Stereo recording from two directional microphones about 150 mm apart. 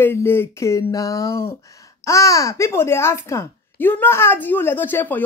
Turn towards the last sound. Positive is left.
turn(degrees=10)  # may be behind; listen again after turning